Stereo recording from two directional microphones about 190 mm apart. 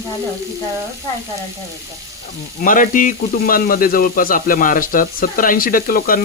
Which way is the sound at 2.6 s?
45° left (ahead or behind).